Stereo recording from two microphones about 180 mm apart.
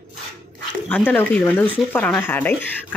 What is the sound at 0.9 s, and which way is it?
Speech, 10° left (ahead or behind).